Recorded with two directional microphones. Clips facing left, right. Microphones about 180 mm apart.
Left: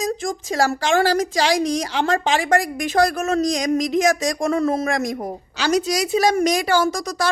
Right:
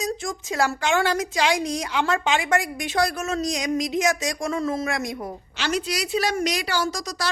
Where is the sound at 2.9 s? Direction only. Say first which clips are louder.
Left 6 dB; 50° left (ahead or behind).